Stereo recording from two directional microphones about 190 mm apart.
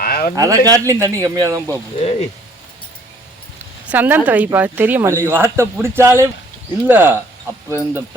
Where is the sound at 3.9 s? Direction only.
10° right (ahead or behind).